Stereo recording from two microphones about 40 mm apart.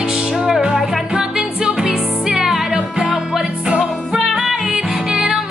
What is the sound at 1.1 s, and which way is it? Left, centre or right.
Music, centre.